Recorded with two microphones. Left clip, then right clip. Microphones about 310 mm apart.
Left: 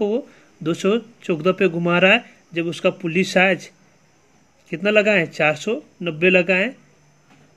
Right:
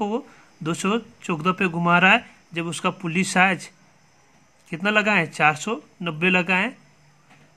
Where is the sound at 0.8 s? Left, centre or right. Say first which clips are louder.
Left 5 dB; right.